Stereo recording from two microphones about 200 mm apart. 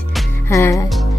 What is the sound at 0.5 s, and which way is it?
Speech, 15° left (ahead or behind).